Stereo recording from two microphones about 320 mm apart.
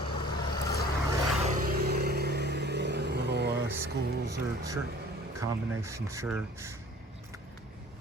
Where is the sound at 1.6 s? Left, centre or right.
Right.